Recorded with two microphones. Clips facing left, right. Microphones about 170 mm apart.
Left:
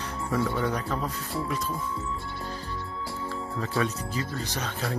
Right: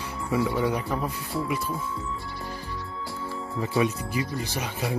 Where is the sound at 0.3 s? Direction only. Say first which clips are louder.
Right 3 dB; 5° right (ahead or behind).